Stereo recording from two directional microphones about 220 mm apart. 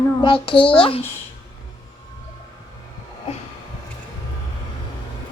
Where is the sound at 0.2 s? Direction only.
25° left (ahead or behind).